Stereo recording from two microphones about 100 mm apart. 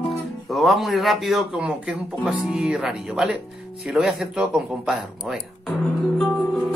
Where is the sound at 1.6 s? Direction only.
10° right (ahead or behind).